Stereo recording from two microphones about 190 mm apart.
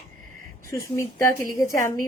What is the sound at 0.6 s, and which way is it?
Speech, 15° left (ahead or behind).